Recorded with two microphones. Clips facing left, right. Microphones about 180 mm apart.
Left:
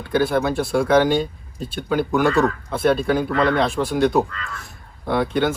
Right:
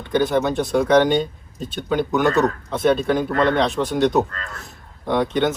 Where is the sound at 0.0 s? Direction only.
5° left (ahead or behind).